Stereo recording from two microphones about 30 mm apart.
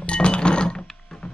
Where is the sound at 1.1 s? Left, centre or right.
Centre.